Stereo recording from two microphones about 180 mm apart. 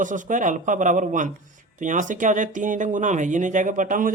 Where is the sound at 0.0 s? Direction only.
45° right (ahead or behind).